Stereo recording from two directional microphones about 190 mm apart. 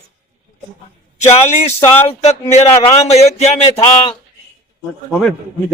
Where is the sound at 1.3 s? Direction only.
35° left (ahead or behind).